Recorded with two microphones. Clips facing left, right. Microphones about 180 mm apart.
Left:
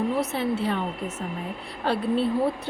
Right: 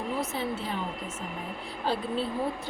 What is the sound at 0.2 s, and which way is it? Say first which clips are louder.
Speech: left 6 dB; 65° left (ahead or behind).